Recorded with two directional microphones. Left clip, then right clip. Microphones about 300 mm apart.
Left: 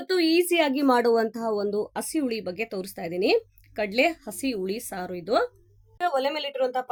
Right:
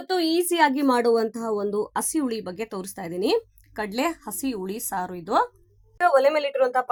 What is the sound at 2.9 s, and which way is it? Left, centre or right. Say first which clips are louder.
Speech: left 1 dB; right.